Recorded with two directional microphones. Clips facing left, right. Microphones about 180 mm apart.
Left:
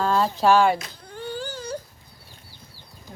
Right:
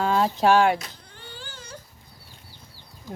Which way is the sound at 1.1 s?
40° left (ahead or behind).